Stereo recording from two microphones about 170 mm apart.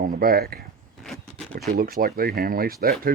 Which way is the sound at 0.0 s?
60° right (ahead or behind).